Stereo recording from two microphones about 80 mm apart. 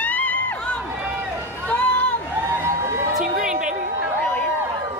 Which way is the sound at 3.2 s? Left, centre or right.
Centre.